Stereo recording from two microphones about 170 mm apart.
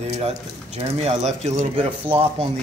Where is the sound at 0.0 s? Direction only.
40° right (ahead or behind).